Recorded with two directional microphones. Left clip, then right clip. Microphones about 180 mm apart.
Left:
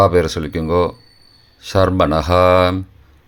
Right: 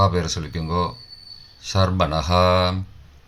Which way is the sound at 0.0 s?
55° left (ahead or behind).